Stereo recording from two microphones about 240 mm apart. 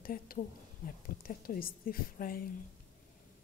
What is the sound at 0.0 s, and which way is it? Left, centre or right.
A woman's voice, left.